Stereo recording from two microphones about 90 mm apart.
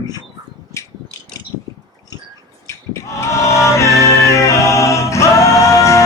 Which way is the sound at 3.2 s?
35° left (ahead or behind).